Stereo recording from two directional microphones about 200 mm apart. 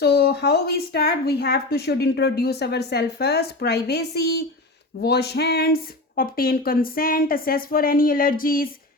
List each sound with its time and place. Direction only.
0.0 s speech: 50° left (ahead or behind)